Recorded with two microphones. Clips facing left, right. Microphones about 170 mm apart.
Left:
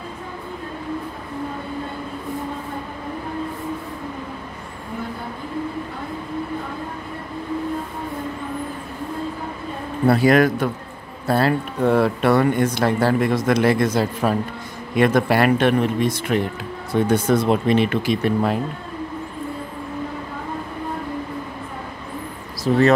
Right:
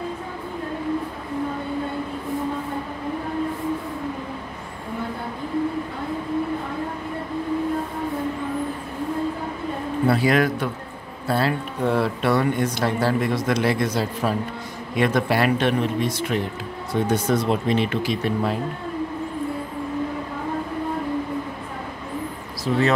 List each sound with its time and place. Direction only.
10.0 s speech: 45° left (ahead or behind)
22.7 s speech: 45° left (ahead or behind)